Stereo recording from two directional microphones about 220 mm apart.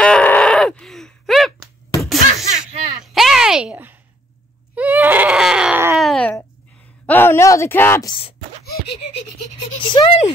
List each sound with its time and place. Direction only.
0.0 s groan: 5° left (ahead or behind)
2.0 s a sound: centre (ahead or behind)
4.7 s screaming: 5° right (ahead or behind)
5.9 s a sound: 5° left (ahead or behind)
7.1 s speech: 10° left (ahead or behind)
8.7 s giggle: 50° left (ahead or behind)
9.8 s speech: 20° left (ahead or behind)